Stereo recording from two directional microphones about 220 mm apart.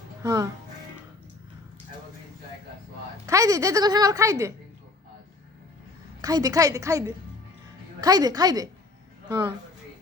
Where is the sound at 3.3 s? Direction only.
15° right (ahead or behind).